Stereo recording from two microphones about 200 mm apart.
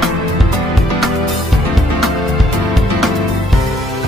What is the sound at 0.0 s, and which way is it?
Music, centre (ahead or behind).